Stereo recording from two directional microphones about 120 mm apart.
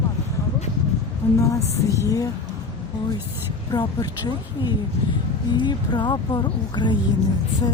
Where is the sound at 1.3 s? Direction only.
25° left (ahead or behind).